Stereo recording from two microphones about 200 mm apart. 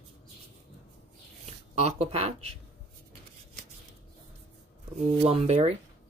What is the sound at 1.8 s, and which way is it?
Speech, 30° right (ahead or behind).